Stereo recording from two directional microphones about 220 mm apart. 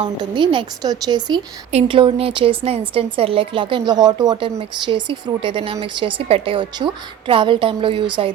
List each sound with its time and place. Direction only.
0.0 s a woman's voice: 20° right (ahead or behind)